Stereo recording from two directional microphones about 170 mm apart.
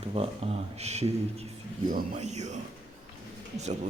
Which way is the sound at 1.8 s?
50° right (ahead or behind).